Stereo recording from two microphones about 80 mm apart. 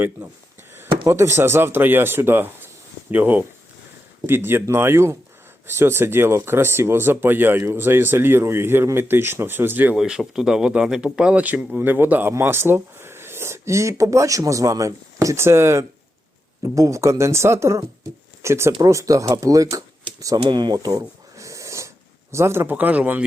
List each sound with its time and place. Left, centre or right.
1.0 s speech: right
9.9 s speech: centre; by 20.4 s right
20.4 s a sound: right
22.3 s speech: right; by 23.2 s centre